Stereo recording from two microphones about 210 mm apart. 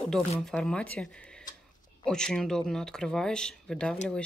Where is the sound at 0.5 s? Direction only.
5° left (ahead or behind).